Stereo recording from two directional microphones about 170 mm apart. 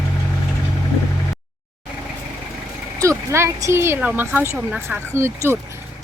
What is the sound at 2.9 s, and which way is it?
Speech, 15° right (ahead or behind).